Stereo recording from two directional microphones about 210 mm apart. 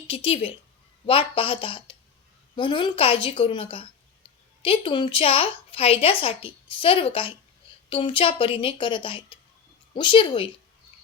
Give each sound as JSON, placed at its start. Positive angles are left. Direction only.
{"t": 0.1, "sound": "a woman's voice", "side_deg": 25}